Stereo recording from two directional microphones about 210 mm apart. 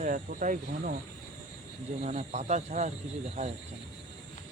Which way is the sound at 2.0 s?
30° right (ahead or behind).